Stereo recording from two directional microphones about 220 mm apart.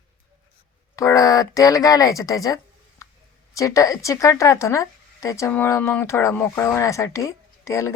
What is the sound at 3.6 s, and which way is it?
Speech, 15° left (ahead or behind).